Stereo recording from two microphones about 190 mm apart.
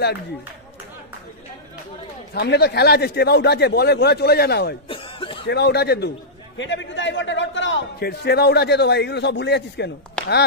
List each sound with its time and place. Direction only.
2.3 s a man's voice: 60° left (ahead or behind)
4.8 s cough: 30° left (ahead or behind)
5.5 s a man's voice: 60° left (ahead or behind)
6.6 s a man's voice: 75° left (ahead or behind)
10.2 s a sound: 5° left (ahead or behind)